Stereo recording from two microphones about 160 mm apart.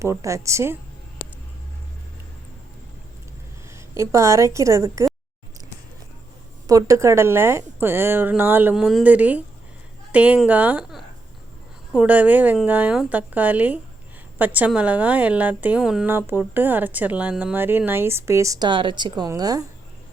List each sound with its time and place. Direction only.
0.0 s a woman's voice: 20° right (ahead or behind)
3.8 s a woman's voice: 15° right (ahead or behind)
6.7 s a woman's voice: 20° right (ahead or behind)